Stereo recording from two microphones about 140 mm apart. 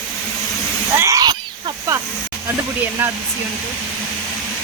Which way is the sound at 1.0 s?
25° right (ahead or behind).